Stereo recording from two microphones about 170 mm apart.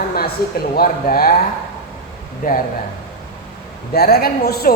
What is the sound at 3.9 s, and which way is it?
Speech, 65° left (ahead or behind).